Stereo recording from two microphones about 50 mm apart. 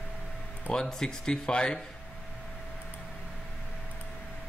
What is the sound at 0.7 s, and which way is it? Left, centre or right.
Speech, centre.